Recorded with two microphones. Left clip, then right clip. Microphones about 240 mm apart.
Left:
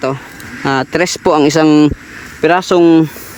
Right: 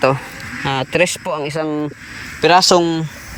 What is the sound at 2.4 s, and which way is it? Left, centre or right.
Speech, centre.